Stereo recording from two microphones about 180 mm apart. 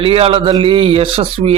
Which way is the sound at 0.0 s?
30° right (ahead or behind).